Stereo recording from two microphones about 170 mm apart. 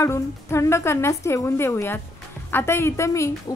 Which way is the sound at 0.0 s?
15° left (ahead or behind).